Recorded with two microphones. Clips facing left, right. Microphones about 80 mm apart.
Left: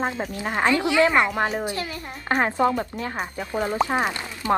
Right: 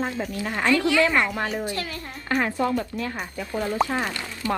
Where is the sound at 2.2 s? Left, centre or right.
Left.